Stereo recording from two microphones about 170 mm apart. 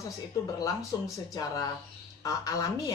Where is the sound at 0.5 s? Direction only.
20° left (ahead or behind).